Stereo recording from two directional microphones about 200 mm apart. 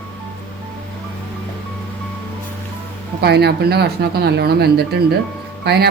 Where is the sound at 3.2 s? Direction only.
55° right (ahead or behind).